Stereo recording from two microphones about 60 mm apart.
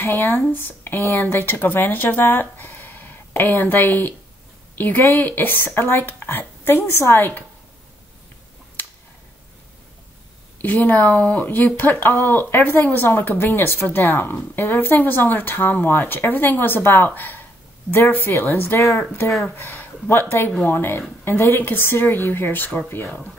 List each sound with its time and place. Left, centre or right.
0.0 s speech: left
10.6 s speech: left
19.5 s speech: left
23.0 s speech: centre